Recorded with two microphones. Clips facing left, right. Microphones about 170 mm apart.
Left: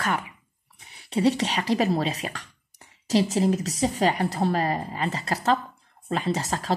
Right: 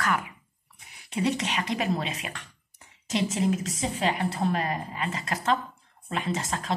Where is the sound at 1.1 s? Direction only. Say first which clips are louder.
Left 5 dB; 35° left (ahead or behind).